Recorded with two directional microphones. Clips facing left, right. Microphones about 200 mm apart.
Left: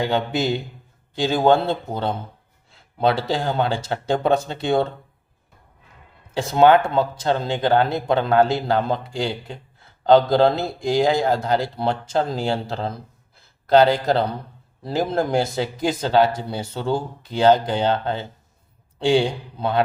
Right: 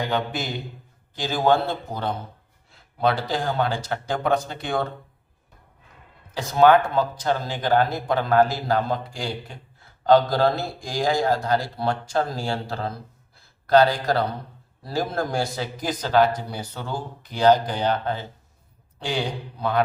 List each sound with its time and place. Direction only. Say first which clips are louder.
0.0 s speech: left 5 dB; 25° left (ahead or behind)
6.3 s speech: left 2 dB; 25° left (ahead or behind)